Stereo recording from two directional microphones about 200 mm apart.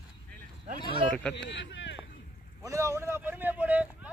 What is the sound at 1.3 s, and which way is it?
Speech, 65° left (ahead or behind).